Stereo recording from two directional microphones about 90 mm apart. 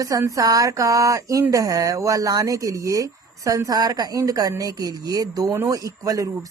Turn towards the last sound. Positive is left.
turn(degrees=-40)  # may be behind; listen again after turning